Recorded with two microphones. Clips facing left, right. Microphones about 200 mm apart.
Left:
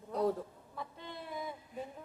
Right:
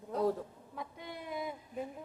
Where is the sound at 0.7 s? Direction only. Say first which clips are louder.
Right 1 dB; 15° right (ahead or behind).